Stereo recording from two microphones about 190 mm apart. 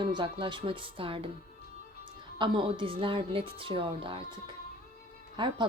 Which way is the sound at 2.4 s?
25° right (ahead or behind).